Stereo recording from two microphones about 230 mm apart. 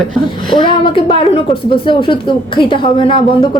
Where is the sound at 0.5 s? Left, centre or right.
Left.